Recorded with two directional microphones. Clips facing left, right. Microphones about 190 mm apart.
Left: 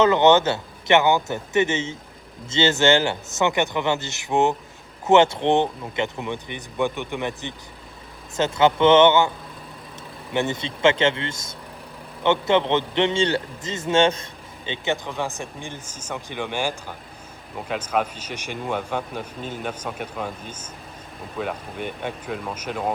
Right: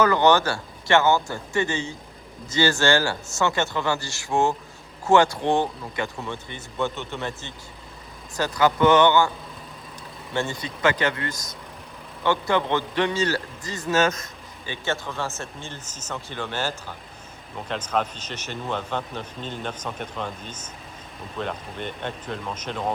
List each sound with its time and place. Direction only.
0.0 s speech: 20° left (ahead or behind)
10.3 s speech: 20° left (ahead or behind)
14.7 s speech: 15° left (ahead or behind)